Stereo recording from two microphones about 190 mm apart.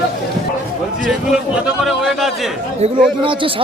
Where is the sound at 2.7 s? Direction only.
30° right (ahead or behind).